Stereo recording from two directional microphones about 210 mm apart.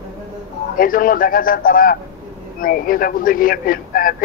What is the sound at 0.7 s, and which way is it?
A man's voice, 40° left (ahead or behind).